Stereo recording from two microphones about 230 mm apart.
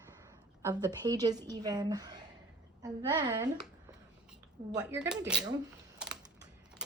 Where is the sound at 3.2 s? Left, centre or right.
Centre.